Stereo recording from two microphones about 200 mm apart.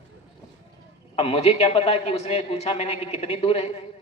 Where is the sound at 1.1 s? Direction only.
30° left (ahead or behind).